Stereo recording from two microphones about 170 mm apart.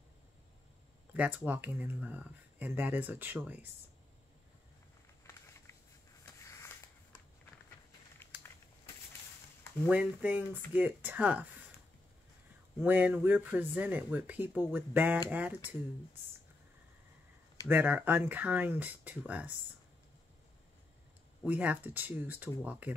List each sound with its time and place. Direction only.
1.1 s speech: 10° right (ahead or behind)
5.2 s a sound: 15° left (ahead or behind)
8.3 s a sound: 10° right (ahead or behind)
9.8 s speech: 10° right (ahead or behind)
12.8 s speech: 10° right (ahead or behind)
17.6 s speech: 10° right (ahead or behind)
21.5 s speech: 10° right (ahead or behind)